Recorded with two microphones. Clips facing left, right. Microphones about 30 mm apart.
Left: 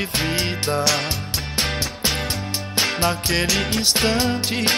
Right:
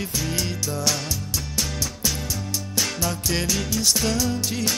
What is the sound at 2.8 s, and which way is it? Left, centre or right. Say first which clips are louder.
Music: left 6 dB; left.